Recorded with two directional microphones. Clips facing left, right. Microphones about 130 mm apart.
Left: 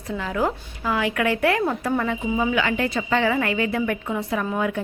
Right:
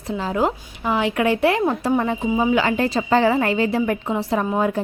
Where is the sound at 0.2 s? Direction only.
25° right (ahead or behind).